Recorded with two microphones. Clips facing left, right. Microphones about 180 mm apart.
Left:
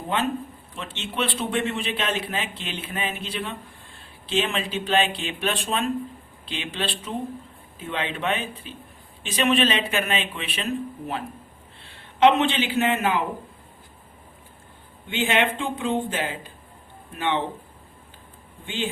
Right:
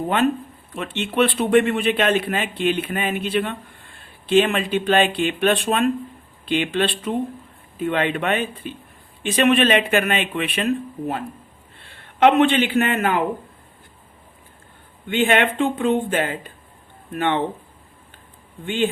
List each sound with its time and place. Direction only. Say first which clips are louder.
0.8 s speech: right 9 dB; 55° right (ahead or behind)
11.8 s a man's voice: right 2 dB; 55° right (ahead or behind)
15.0 s speech: right 5 dB; 55° right (ahead or behind)
18.6 s speech: right 8 dB; 55° right (ahead or behind)